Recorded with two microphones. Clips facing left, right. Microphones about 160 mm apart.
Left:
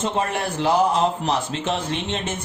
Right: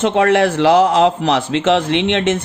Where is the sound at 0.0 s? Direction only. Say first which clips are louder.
Right 11 dB; 75° right (ahead or behind).